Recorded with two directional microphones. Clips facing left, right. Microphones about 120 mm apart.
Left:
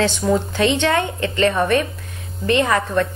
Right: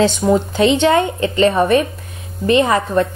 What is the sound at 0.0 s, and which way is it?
A woman's voice, 15° right (ahead or behind).